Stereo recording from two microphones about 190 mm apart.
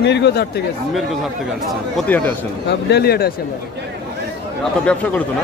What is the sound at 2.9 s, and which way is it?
Speech, 55° left (ahead or behind).